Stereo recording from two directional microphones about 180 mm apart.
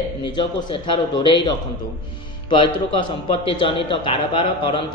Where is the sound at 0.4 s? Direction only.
25° left (ahead or behind).